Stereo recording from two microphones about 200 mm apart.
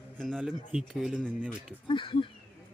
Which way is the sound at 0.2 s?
Centre (ahead or behind).